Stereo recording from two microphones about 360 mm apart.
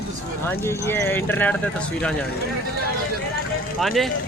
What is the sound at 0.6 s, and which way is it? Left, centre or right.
Speech, centre.